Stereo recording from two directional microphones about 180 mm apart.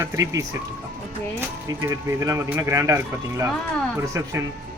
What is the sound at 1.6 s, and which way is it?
Speech, 15° right (ahead or behind).